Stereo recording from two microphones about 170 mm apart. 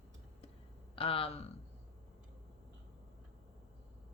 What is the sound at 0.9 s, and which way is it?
Speech, 35° left (ahead or behind).